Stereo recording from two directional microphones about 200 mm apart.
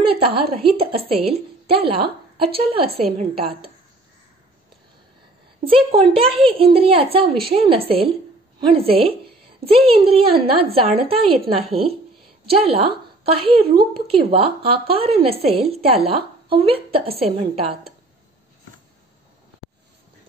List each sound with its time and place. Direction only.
0.2 s a woman's voice: 25° right (ahead or behind)
5.6 s a woman's voice: 30° right (ahead or behind)